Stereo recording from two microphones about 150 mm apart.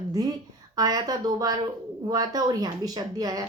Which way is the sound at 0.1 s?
25° right (ahead or behind).